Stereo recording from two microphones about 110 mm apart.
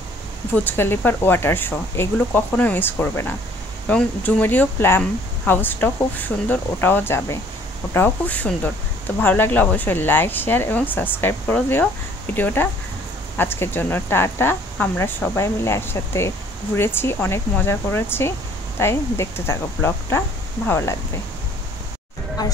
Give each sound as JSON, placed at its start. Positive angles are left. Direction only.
{"t": 0.6, "sound": "speech", "side_deg": 20}